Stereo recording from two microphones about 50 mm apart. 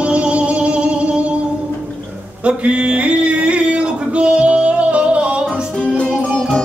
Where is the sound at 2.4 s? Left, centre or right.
Right.